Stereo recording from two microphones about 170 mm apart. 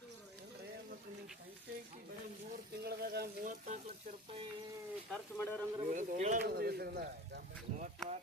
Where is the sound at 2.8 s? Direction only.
70° right (ahead or behind).